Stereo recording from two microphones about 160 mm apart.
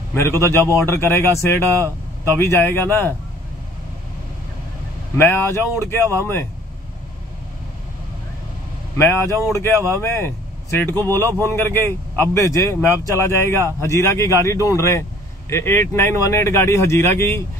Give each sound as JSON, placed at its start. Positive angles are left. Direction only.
{"t": 0.1, "sound": "a man's voice", "side_deg": 15}
{"t": 5.1, "sound": "a man's voice", "side_deg": 15}
{"t": 8.9, "sound": "a man's voice", "side_deg": 15}